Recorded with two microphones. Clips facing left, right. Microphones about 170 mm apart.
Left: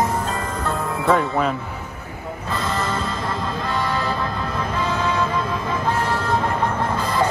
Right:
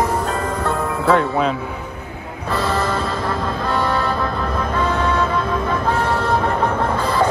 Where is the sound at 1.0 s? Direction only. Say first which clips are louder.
Right 2 dB; 5° left (ahead or behind).